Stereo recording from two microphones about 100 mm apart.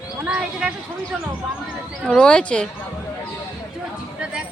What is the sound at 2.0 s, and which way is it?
Speech, 10° left (ahead or behind).